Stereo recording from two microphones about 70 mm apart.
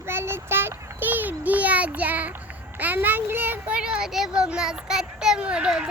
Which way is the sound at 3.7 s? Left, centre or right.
Centre.